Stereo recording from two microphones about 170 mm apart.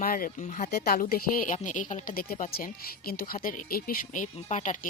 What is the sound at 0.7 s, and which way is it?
Speech, 65° left (ahead or behind).